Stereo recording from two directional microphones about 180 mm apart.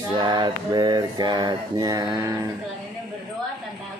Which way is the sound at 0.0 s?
25° right (ahead or behind).